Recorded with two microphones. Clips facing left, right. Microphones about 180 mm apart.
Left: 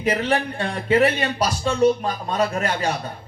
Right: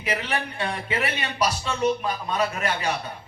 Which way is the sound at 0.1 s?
40° left (ahead or behind).